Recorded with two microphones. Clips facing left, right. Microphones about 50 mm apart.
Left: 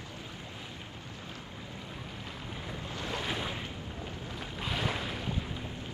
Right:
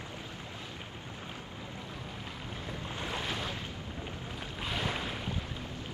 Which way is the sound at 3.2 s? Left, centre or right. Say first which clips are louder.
Left 1 dB; centre.